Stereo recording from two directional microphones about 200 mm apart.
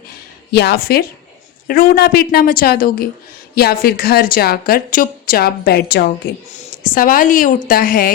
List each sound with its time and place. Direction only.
0.5 s a woman's voice: 55° left (ahead or behind)